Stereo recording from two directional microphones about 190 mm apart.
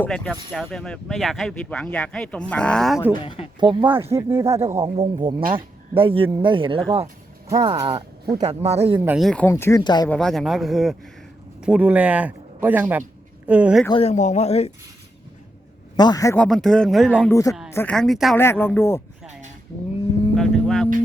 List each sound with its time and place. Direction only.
0.0 s speech: 5° left (ahead or behind)
3.2 s speech: 30° left (ahead or behind)
3.6 s speech: 25° right (ahead or behind)
4.1 s a man's voice: 15° right (ahead or behind)
4.4 s speech: 35° right (ahead or behind)
9.0 s a man's voice: 10° right (ahead or behind)
9.2 s speech: 5° left (ahead or behind)
10.1 s a man's voice: 5° left (ahead or behind)
13.9 s speech: 35° left (ahead or behind)
16.0 s speech: 20° left (ahead or behind); by 17.2 s 5° right (ahead or behind)
17.2 s speech: 15° left (ahead or behind)
17.9 s speech: centre (ahead or behind)
18.3 s speech: 10° left (ahead or behind)
20.3 s speech: centre (ahead or behind)